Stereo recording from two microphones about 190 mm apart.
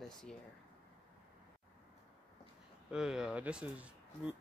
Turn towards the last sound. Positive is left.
turn(degrees=-5)  # may be behind; listen again after turning